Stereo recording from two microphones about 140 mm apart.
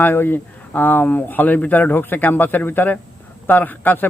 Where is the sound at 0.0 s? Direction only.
15° left (ahead or behind).